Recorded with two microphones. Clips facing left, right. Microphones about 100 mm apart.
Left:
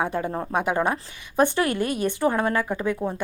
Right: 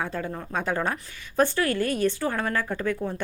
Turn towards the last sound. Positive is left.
turn(degrees=15)  # may be behind; listen again after turning